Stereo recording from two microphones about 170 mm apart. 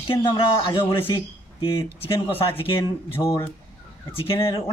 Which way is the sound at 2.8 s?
15° left (ahead or behind).